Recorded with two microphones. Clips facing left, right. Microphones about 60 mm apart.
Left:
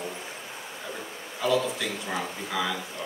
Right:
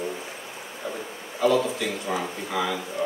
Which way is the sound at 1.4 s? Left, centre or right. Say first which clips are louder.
Right 4 dB; right.